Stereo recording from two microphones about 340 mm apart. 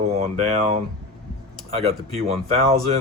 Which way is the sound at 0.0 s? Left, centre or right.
Centre.